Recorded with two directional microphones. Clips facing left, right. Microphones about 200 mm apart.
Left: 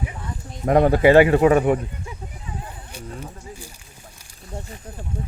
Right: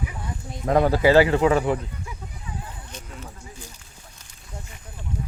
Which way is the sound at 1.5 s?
25° left (ahead or behind).